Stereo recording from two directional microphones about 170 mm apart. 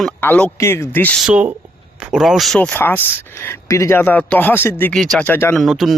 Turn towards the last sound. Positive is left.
turn(degrees=0)  # may be behind; listen again after turning